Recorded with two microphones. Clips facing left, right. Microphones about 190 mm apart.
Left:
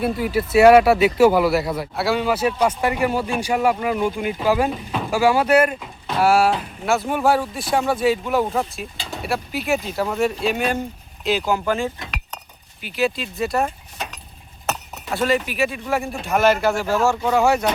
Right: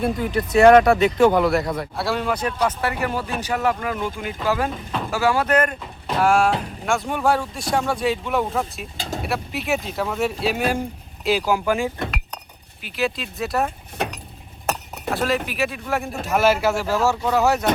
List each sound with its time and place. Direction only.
0.0 s speech: 5° left (ahead or behind)
9.0 s vehicle: 45° right (ahead or behind)
9.2 s speech: centre (ahead or behind)
14.0 s a sound: 60° right (ahead or behind)
15.1 s speech: centre (ahead or behind)